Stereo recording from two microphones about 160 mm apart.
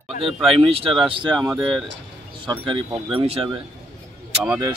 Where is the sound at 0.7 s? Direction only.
35° right (ahead or behind).